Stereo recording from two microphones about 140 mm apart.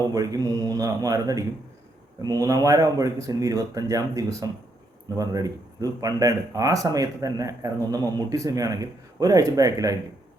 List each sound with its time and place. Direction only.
0.1 s speech: 25° right (ahead or behind)